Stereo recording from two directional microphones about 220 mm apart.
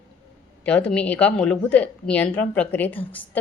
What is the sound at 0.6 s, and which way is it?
A woman's voice, 5° left (ahead or behind).